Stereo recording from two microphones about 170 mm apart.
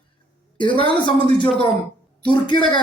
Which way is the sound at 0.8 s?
30° left (ahead or behind).